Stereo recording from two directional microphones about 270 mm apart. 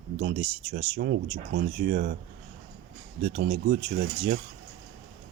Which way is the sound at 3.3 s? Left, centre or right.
Right.